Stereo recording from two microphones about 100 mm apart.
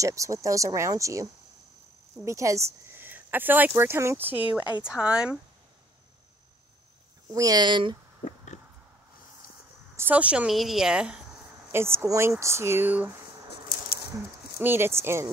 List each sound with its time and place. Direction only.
0.0 s a woman's voice: 30° right (ahead or behind); by 5.4 s 10° right (ahead or behind)
7.3 s speech: 40° right (ahead or behind)
9.9 s a woman's voice: 15° right (ahead or behind)
11.7 s speech: 25° right (ahead or behind)
14.6 s speech: 20° right (ahead or behind)